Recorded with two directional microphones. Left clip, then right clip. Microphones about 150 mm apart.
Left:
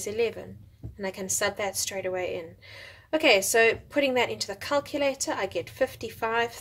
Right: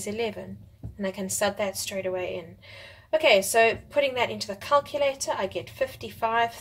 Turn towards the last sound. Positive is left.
turn(degrees=40)  # may be behind; listen again after turning